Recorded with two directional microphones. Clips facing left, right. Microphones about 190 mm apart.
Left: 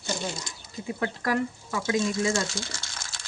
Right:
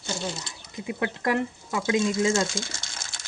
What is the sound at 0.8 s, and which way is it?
Speech, 20° right (ahead or behind).